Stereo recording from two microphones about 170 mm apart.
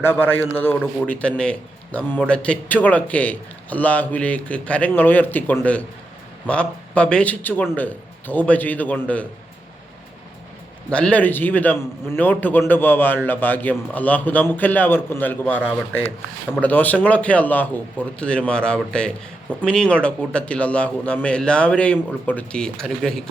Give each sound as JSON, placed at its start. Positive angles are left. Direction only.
{"t": 0.0, "sound": "a man's voice", "side_deg": 10}
{"t": 10.8, "sound": "a man's voice", "side_deg": 5}